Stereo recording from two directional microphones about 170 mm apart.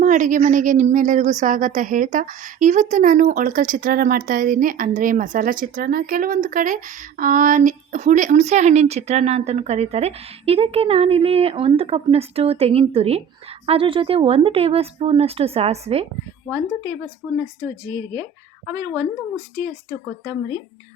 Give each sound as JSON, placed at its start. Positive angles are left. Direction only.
{"t": 0.0, "sound": "a woman's voice", "side_deg": -50}
{"t": 16.5, "sound": "a woman's voice", "side_deg": -15}
{"t": 17.8, "sound": "speech", "side_deg": 25}
{"t": 18.2, "sound": "speech", "side_deg": -20}